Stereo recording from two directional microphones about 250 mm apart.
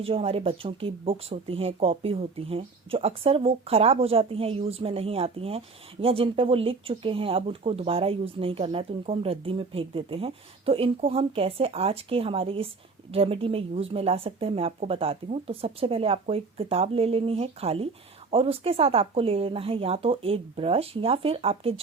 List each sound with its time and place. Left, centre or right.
0.0 s speech: right